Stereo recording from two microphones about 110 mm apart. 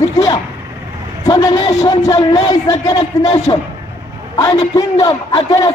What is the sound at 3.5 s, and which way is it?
Speech, 40° left (ahead or behind).